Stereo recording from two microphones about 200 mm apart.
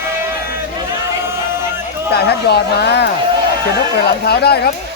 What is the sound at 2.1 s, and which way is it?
Speech, 55° left (ahead or behind).